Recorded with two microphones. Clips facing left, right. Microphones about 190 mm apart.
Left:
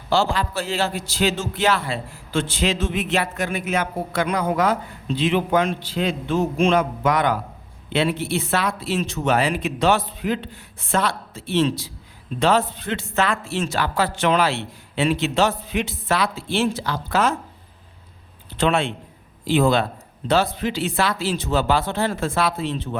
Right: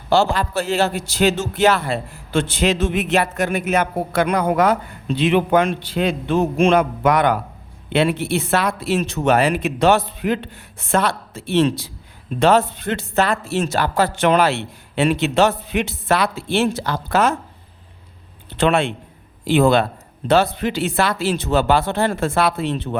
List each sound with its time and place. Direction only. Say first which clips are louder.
0.1 s speech: right 4 dB; 45° right (ahead or behind); by 3.2 s 65° right (ahead or behind)
3.2 s speech: right 6 dB; 45° right (ahead or behind)
3.8 s speech: right 4 dB; 60° right (ahead or behind)
12.8 s speech: right 3 dB; 45° right (ahead or behind); by 17.3 s 60° right (ahead or behind)
18.5 s speech: right 3 dB; 65° right (ahead or behind)